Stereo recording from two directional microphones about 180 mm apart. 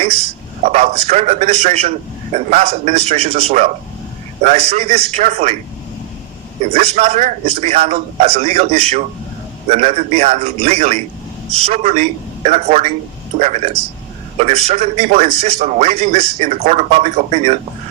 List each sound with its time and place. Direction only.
0.6 s a man's voice: 40° right (ahead or behind)
6.7 s a man's voice: 35° right (ahead or behind)